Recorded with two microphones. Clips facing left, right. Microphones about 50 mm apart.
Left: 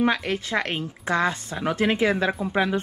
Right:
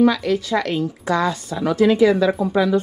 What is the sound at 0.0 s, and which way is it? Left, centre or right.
A woman's voice, left.